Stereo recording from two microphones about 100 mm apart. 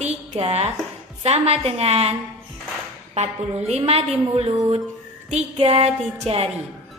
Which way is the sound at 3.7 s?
85° right.